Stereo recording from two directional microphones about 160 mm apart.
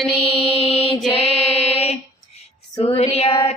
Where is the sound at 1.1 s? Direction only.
40° left (ahead or behind).